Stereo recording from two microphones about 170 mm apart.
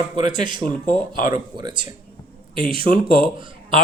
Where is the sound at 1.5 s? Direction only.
30° right (ahead or behind).